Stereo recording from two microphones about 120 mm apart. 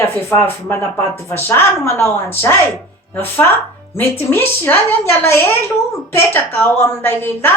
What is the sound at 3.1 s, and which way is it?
A woman's voice, 15° left (ahead or behind).